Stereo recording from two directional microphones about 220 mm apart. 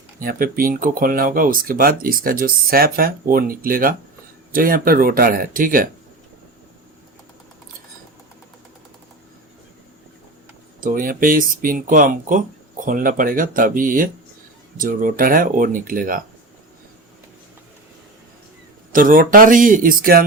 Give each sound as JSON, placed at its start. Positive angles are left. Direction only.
{"t": 0.2, "sound": "speech", "side_deg": -40}
{"t": 10.8, "sound": "speech", "side_deg": -40}
{"t": 18.9, "sound": "speech", "side_deg": -40}